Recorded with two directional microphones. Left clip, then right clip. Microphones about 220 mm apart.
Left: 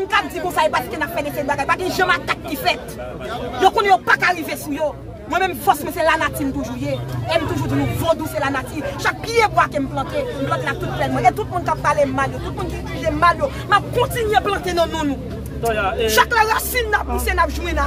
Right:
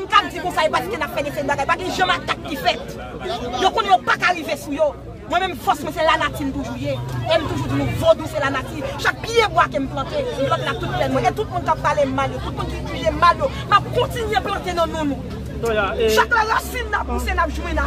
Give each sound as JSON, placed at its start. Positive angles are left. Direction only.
{"t": 0.1, "sound": "speech", "side_deg": 0}
{"t": 13.9, "sound": "speech", "side_deg": 20}
{"t": 15.6, "sound": "speech", "side_deg": -5}
{"t": 16.1, "sound": "speech", "side_deg": 35}
{"t": 17.3, "sound": "speech", "side_deg": 50}